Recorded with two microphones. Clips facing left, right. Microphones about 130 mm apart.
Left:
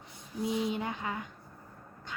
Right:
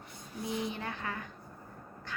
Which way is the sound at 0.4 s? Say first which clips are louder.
Left 5 dB; 20° left (ahead or behind).